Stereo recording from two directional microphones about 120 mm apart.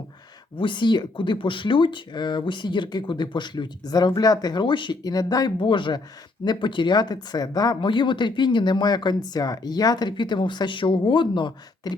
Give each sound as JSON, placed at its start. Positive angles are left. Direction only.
{"t": 0.5, "sound": "speech", "side_deg": 45}
{"t": 5.5, "sound": "speech", "side_deg": 45}